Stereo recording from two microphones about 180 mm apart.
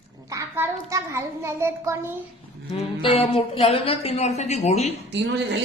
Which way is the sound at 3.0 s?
30° left (ahead or behind).